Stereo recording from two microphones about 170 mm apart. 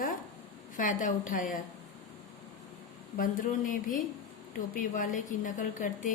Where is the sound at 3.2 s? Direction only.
50° left (ahead or behind).